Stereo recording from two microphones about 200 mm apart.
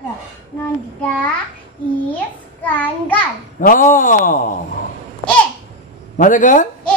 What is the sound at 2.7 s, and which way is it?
Speech, 10° left (ahead or behind).